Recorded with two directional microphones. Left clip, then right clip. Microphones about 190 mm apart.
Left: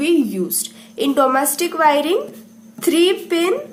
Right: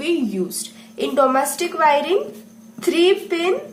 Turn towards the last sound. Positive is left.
turn(degrees=30)  # may be behind; listen again after turning